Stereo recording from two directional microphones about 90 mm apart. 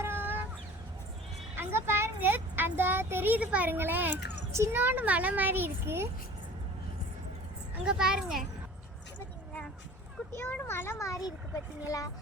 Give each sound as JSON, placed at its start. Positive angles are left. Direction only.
{"t": 0.0, "sound": "meow", "side_deg": -25}
{"t": 1.5, "sound": "a sound", "side_deg": -25}
{"t": 4.5, "sound": "a child's voice", "side_deg": -25}
{"t": 7.9, "sound": "a child's voice", "side_deg": -10}
{"t": 10.3, "sound": "a child's voice", "side_deg": 25}